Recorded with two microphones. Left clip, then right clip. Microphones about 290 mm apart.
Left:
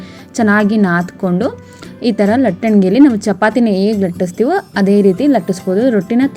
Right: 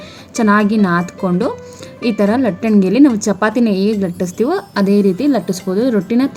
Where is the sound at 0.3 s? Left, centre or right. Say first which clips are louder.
Left 1 dB; centre.